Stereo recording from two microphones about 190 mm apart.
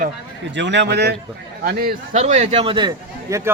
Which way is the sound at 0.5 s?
70° right (ahead or behind).